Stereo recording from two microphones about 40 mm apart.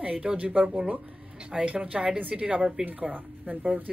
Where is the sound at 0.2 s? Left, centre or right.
Right.